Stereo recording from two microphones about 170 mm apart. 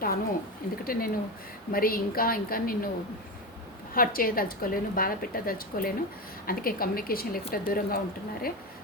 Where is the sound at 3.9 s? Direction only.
55° left (ahead or behind).